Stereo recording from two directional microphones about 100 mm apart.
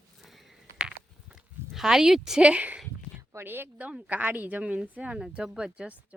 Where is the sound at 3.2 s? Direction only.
25° right (ahead or behind).